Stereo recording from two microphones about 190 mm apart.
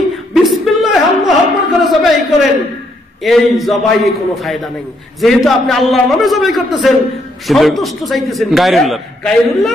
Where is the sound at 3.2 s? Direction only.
Centre (ahead or behind).